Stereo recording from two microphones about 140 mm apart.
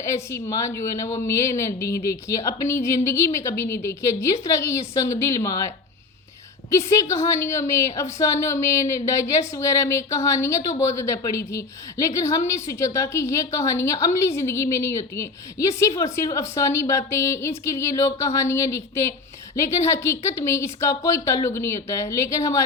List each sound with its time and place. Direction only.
0.0 s speech: 20° left (ahead or behind)